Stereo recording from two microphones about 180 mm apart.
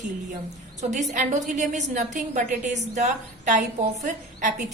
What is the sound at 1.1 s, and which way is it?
A woman's voice, 45° right (ahead or behind).